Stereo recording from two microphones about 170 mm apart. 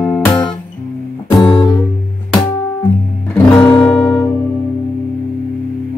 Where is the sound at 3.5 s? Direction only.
15° left (ahead or behind).